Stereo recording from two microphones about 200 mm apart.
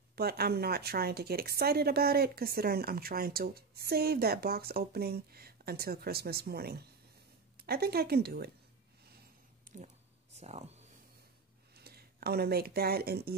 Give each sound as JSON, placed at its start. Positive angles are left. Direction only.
{"t": 0.1, "sound": "a woman's voice", "side_deg": -50}
{"t": 9.7, "sound": "a sound", "side_deg": -40}
{"t": 10.3, "sound": "speech", "side_deg": -35}
{"t": 11.7, "sound": "speech", "side_deg": -50}